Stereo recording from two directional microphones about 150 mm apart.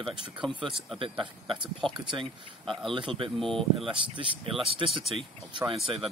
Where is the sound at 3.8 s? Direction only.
35° right (ahead or behind).